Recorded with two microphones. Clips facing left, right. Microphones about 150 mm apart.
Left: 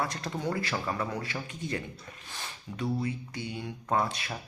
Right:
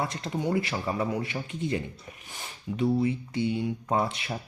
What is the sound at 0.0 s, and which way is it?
Speech, 25° right (ahead or behind).